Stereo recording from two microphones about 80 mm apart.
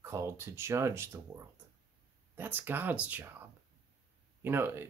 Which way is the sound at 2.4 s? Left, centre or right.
Right.